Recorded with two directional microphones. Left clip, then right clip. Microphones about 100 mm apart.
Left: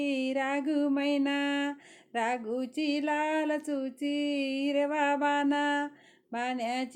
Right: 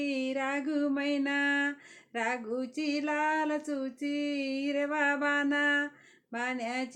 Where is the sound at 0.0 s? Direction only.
45° left (ahead or behind).